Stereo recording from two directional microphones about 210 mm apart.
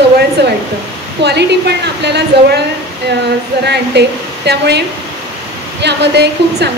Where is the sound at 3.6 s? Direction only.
50° right (ahead or behind).